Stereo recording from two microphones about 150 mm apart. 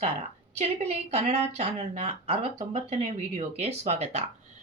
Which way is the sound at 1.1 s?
45° right (ahead or behind).